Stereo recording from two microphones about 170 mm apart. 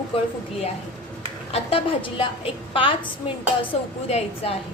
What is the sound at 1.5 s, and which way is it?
A woman's voice, 35° left (ahead or behind).